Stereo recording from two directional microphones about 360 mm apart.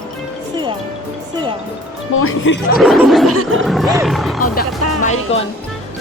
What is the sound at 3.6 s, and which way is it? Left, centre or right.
Speech, centre.